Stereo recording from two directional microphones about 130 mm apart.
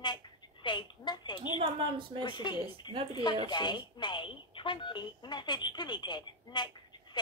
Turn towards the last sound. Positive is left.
turn(degrees=35)  # may be behind; listen again after turning